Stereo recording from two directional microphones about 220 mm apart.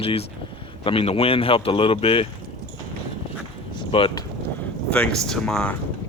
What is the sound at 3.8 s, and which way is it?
Speech, 25° left (ahead or behind).